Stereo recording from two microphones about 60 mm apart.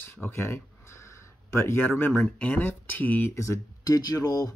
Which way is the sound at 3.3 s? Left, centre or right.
Left.